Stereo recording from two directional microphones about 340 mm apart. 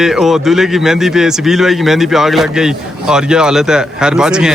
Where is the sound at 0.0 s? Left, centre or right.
Centre.